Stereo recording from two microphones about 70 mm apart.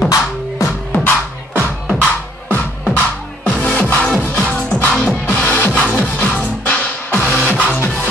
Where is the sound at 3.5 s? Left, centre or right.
Centre.